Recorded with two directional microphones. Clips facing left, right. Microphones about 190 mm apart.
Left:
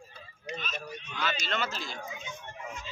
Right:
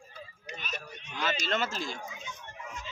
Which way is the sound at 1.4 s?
45° right (ahead or behind).